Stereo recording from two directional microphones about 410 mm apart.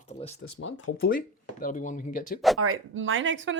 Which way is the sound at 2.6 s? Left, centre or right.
Right.